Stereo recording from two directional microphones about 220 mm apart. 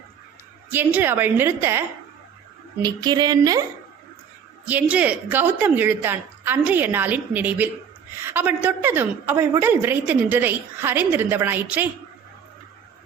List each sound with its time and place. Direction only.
0.7 s a woman's voice: 10° right (ahead or behind)
2.8 s a woman's voice: 20° right (ahead or behind)
4.6 s a woman's voice: 5° right (ahead or behind)